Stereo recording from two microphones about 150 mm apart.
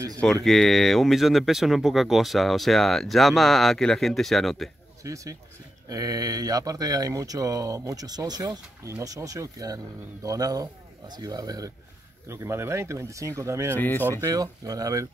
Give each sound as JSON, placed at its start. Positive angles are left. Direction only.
{"t": 0.2, "sound": "speech", "side_deg": 0}
{"t": 5.0, "sound": "speech", "side_deg": -20}
{"t": 13.7, "sound": "speech", "side_deg": 15}
{"t": 14.2, "sound": "speech", "side_deg": -25}